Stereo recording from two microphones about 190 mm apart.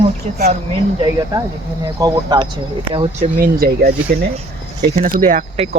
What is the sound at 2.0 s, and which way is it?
Speech, 20° right (ahead or behind).